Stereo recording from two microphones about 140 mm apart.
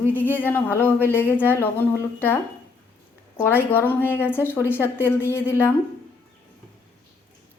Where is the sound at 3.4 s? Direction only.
15° left (ahead or behind).